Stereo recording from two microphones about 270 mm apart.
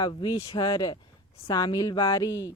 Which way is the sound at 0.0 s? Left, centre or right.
Centre.